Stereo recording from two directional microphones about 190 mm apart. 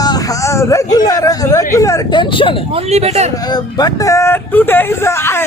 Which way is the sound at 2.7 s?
35° right (ahead or behind).